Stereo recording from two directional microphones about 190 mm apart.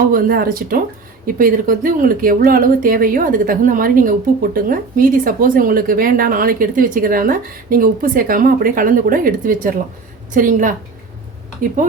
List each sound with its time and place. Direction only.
0.1 s speech: 50° right (ahead or behind)